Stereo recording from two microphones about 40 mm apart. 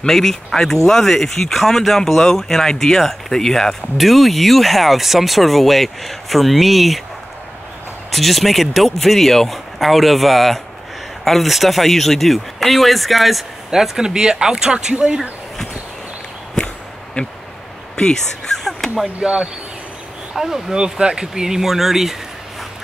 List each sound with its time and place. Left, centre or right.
0.0 s speech: centre
4.0 s speech: centre
8.1 s speech: centre; by 15.2 s right
16.5 s a sound: centre
17.9 s speech: left
18.6 s a sound: centre
19.2 s speech: right
20.3 s speech: centre
20.7 s speech: centre